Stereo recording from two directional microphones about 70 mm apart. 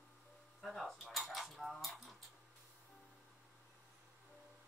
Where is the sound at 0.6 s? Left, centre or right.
Centre.